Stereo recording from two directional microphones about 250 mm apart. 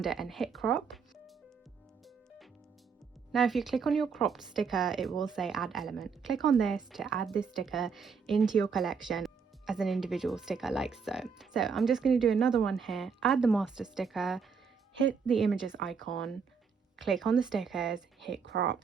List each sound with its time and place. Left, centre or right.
0.0 s speech: centre
3.3 s speech: centre
18.4 s speech: right